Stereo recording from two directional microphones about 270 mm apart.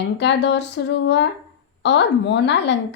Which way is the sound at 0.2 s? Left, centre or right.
Left.